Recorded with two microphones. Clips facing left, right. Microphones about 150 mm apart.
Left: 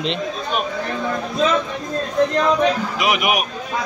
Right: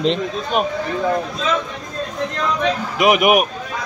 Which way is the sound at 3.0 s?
50° right (ahead or behind).